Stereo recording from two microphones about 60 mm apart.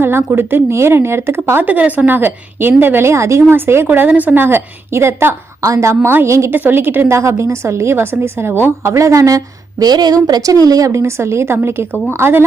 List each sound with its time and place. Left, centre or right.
0.0 s a woman's voice: right
1.6 s a woman's voice: right
3.8 s a woman's voice: right
5.6 s a woman's voice: right
6.5 s a woman's voice: right
7.1 s a woman's voice: right
8.9 s a woman's voice: right
11.0 s a woman's voice: right